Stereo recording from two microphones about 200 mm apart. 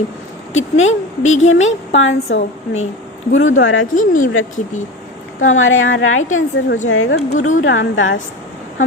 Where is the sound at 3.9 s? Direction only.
40° left (ahead or behind).